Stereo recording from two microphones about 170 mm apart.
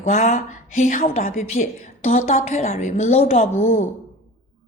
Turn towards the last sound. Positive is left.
turn(degrees=45)  # may be behind; listen again after turning